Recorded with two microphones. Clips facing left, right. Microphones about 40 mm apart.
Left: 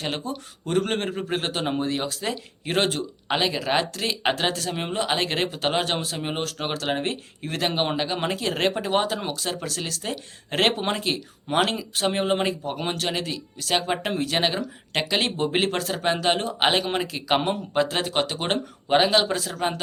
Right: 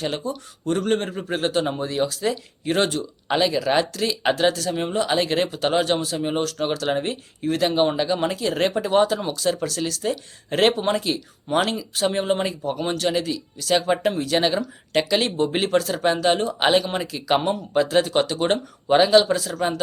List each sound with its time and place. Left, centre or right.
0.0 s a man's voice: left
13.8 s speech: left